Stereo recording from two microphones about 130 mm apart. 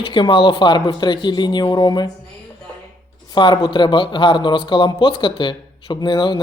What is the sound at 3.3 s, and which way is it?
Speech, 35° left (ahead or behind).